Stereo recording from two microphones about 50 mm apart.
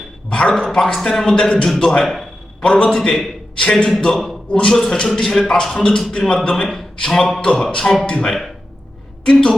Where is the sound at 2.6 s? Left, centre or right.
Centre.